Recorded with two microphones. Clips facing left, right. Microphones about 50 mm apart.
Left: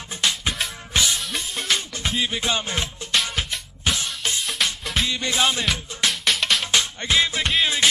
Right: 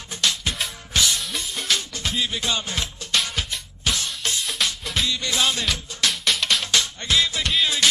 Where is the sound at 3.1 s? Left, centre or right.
Centre.